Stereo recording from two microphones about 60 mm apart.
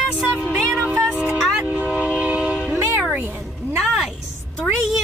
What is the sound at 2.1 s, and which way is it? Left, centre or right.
Train, right.